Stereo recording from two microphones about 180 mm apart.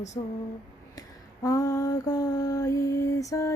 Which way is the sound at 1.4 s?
20° left (ahead or behind).